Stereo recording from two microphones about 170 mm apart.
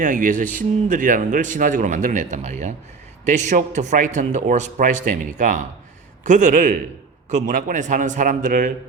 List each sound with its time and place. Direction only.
0.0 s a man's voice: 50° right (ahead or behind)